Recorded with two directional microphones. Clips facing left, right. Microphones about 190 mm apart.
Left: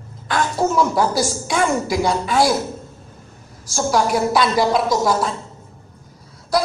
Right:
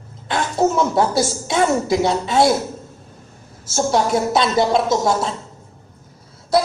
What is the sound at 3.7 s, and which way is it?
A woman's voice, 25° right (ahead or behind).